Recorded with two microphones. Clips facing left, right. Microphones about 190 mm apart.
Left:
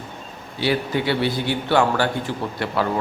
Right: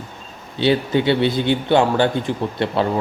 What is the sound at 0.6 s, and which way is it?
Speech, 25° right (ahead or behind).